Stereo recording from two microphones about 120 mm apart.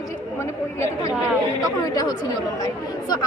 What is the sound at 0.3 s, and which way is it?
Chatter, 25° left (ahead or behind).